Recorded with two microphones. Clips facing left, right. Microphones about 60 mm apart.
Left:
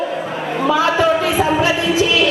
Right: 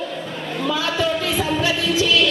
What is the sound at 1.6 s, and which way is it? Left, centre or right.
Music, centre.